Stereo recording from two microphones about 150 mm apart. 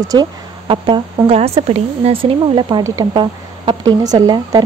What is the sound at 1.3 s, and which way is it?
Speech, 45° right (ahead or behind).